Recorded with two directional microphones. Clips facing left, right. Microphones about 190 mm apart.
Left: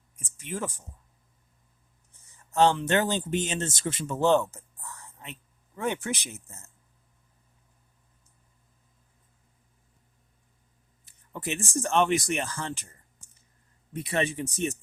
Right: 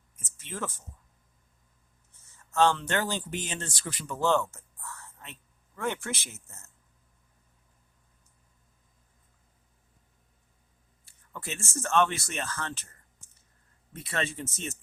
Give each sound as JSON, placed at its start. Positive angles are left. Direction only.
{"t": 0.2, "sound": "speech", "side_deg": 15}
{"t": 2.2, "sound": "speech", "side_deg": 15}
{"t": 11.0, "sound": "speech", "side_deg": 20}